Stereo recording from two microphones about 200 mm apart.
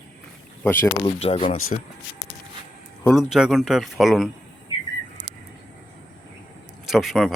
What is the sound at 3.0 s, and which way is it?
Speech, centre (ahead or behind).